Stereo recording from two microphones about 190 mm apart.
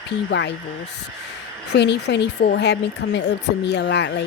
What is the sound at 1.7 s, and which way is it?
A woman's voice, 65° left (ahead or behind).